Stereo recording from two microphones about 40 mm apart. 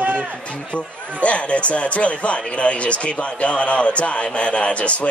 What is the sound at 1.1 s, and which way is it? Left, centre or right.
Speech, left.